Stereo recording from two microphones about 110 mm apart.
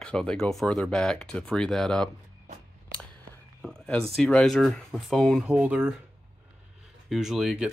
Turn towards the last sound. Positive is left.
turn(degrees=-5)  # may be behind; listen again after turning